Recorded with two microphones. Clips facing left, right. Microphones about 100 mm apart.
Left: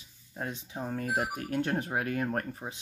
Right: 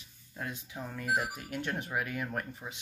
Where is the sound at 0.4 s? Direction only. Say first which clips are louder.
Left 3 dB; 35° left (ahead or behind).